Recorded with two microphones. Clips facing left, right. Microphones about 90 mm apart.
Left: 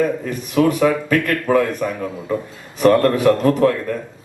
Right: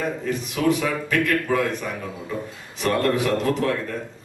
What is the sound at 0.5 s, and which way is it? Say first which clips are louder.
A man's voice: left 8 dB; 50° left (ahead or behind).